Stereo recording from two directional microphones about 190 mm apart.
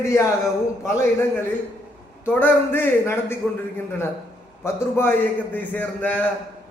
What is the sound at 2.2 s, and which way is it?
A man's voice, 10° left (ahead or behind).